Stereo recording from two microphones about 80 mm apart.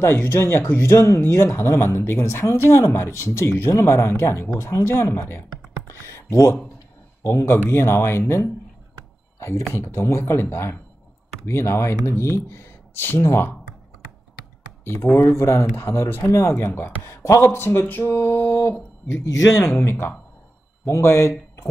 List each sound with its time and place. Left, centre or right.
0.0 s speech: left
5.9 s a sound: left
7.2 s speech: left
14.9 s speech: left